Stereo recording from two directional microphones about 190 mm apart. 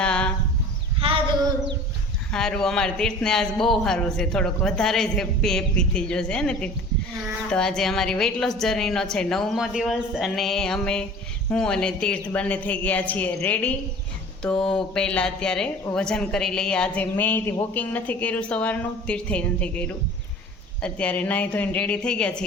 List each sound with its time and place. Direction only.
0.0 s chicken: 5° left (ahead or behind)
0.9 s a sound: 30° right (ahead or behind)
2.3 s a man's voice: 5° left (ahead or behind)